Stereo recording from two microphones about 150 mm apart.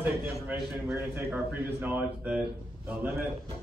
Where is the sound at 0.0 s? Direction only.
10° right (ahead or behind).